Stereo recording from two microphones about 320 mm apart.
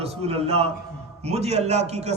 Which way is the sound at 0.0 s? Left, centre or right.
Centre.